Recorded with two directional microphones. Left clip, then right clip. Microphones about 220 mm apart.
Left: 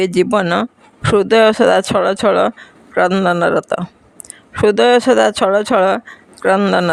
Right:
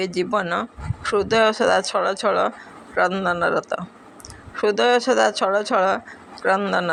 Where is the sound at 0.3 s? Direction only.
50° left (ahead or behind).